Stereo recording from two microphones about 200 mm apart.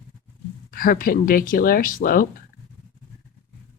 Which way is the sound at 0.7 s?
45° left (ahead or behind).